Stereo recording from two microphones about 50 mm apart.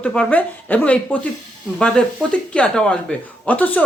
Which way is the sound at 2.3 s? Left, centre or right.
Left.